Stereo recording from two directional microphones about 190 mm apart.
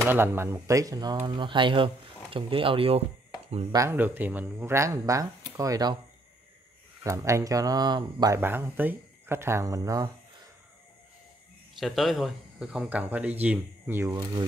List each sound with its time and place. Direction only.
0.0 s speech: 10° right (ahead or behind); by 3.0 s 30° right (ahead or behind)
3.7 s speech: 15° right (ahead or behind)
7.0 s speech: 15° right (ahead or behind)
11.8 s speech: centre (ahead or behind); by 14.4 s 15° right (ahead or behind)